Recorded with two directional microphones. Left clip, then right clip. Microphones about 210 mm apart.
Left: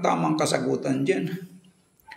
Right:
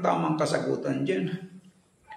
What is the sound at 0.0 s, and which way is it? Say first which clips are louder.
Speech: left 2 dB; 35° left (ahead or behind).